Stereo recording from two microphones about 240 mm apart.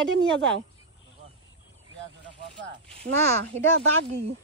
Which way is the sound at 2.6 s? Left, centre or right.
Right.